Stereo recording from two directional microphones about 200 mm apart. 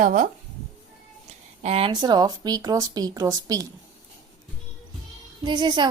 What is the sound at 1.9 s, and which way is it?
A woman's voice, 20° right (ahead or behind).